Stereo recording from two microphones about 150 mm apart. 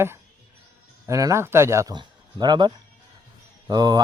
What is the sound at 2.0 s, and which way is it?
Speech, 30° right (ahead or behind).